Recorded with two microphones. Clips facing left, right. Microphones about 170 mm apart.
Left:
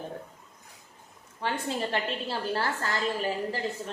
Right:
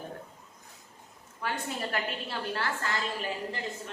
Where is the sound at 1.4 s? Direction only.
30° left (ahead or behind).